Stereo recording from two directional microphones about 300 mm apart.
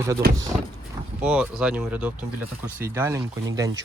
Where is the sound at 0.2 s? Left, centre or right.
Right.